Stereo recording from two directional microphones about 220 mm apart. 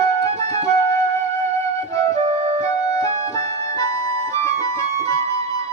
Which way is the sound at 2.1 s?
30° right (ahead or behind).